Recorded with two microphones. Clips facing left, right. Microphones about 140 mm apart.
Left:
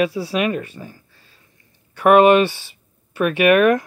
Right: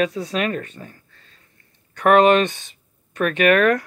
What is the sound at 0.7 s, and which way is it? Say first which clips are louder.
Speech: left 3 dB; 25° left (ahead or behind).